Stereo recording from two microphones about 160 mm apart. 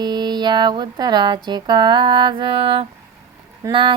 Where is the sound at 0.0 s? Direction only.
25° right (ahead or behind).